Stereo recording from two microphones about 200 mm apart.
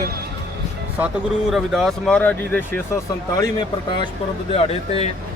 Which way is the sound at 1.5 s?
Centre (ahead or behind).